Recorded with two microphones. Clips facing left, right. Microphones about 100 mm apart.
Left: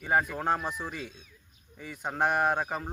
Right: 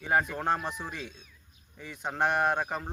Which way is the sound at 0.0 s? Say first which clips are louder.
Even; 5° left (ahead or behind).